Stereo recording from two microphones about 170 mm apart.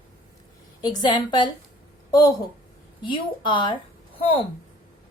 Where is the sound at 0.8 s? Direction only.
25° left (ahead or behind).